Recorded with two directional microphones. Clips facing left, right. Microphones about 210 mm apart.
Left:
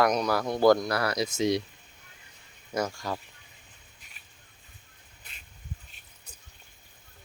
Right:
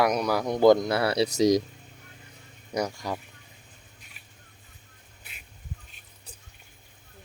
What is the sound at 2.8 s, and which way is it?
Speech, 15° right (ahead or behind).